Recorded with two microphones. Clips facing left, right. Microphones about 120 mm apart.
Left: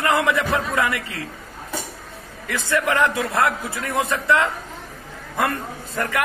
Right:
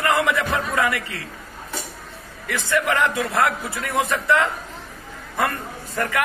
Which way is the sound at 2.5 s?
20° left (ahead or behind).